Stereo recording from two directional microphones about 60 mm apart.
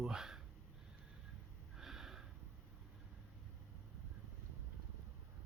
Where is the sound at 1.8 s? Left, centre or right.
Centre.